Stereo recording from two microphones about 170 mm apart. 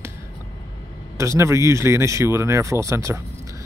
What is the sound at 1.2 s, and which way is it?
Speech, 15° right (ahead or behind).